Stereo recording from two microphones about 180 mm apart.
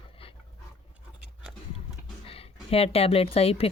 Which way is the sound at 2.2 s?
30° left (ahead or behind).